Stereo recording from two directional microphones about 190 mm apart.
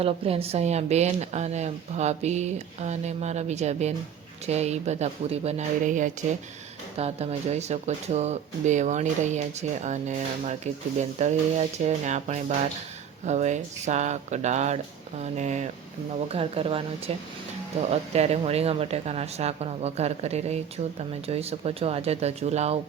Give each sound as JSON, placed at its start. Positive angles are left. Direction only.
{"t": 0.0, "sound": "speech", "side_deg": -30}